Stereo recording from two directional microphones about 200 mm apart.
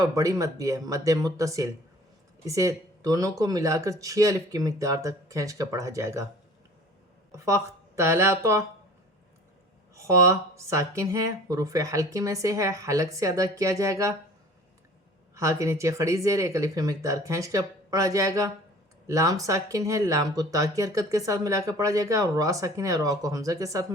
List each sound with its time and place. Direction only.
0.0 s speech: 15° right (ahead or behind)
7.3 s speech: 15° right (ahead or behind)
9.9 s speech: 15° right (ahead or behind)
15.4 s speech: 15° right (ahead or behind)